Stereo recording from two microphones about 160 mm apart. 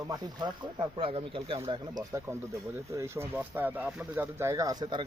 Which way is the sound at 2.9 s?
15° right (ahead or behind).